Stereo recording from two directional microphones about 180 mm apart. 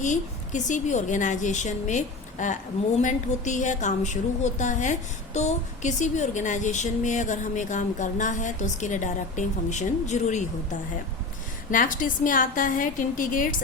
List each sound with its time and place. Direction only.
0.0 s a woman's voice: 45° left (ahead or behind)
11.7 s a woman's voice: 50° left (ahead or behind)